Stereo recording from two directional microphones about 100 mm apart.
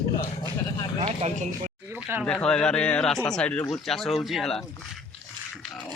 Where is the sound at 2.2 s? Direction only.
10° left (ahead or behind).